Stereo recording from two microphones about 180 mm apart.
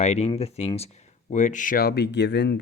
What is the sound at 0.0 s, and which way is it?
Speech, 35° left (ahead or behind).